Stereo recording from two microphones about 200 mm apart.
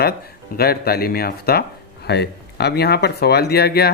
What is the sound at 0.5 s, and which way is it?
Speech, 50° left (ahead or behind).